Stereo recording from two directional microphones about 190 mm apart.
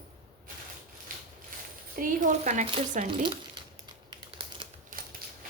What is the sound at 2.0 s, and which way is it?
A woman's voice, 45° right (ahead or behind).